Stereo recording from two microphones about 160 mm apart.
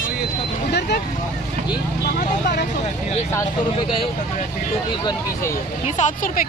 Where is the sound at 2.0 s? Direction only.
80° left.